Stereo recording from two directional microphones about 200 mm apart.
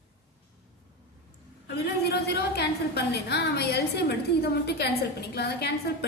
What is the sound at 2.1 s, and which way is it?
A woman's voice, 55° left (ahead or behind).